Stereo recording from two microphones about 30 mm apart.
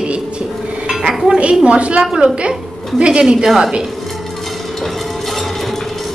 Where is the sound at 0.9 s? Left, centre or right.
Centre.